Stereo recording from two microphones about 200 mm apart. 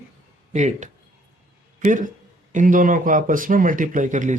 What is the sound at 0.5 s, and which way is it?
Speech, 35° right (ahead or behind).